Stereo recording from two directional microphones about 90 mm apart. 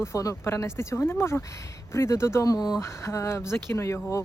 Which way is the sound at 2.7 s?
30° left (ahead or behind).